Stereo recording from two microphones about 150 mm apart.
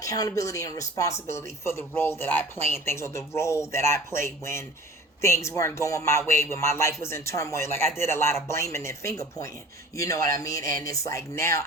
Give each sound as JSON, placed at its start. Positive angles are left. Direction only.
{"t": 0.0, "sound": "speech", "side_deg": 25}